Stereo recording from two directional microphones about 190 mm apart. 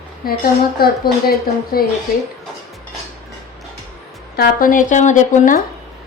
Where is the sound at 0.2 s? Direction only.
50° left (ahead or behind).